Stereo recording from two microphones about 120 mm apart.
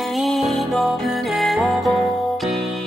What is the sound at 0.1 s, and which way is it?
Music, centre (ahead or behind).